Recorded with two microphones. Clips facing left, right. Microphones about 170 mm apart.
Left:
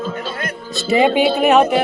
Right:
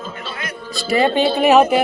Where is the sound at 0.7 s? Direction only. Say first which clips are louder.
Left 2 dB; 20° left (ahead or behind).